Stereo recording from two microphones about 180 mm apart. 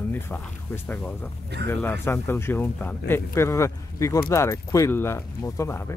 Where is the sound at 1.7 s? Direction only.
15° left (ahead or behind).